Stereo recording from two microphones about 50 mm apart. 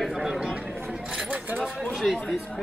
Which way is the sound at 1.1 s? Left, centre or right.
Right.